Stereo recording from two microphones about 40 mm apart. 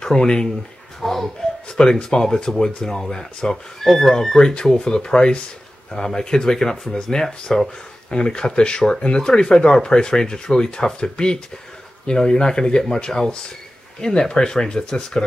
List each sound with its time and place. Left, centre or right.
0.0 s speech: centre
1.0 s a sound: centre
1.8 s speech: centre